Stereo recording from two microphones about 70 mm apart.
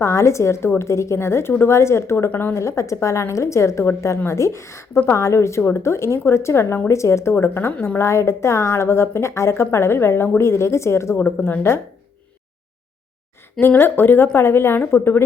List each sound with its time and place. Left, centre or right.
0.0 s a woman's voice: left
2.3 s a woman's voice: left
2.6 s a woman's voice: left
11.2 s a woman's voice: left
13.6 s a woman's voice: left